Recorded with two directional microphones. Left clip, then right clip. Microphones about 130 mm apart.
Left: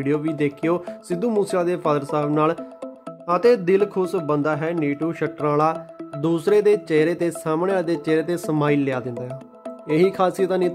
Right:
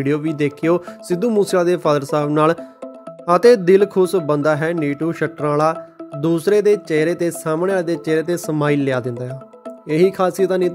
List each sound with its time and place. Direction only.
0.0 s speech: 30° right (ahead or behind)